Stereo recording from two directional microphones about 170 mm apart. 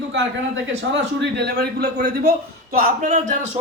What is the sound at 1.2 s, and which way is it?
Speech, 75° right (ahead or behind).